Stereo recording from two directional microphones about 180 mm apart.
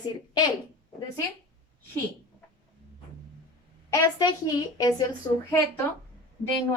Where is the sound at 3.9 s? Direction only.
20° left (ahead or behind).